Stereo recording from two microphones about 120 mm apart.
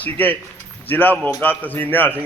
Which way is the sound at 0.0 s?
15° left (ahead or behind).